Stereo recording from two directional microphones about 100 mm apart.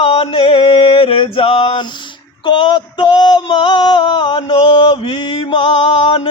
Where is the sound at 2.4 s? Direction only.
60° left (ahead or behind).